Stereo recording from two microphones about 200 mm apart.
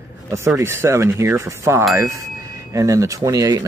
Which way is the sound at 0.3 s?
15° right (ahead or behind).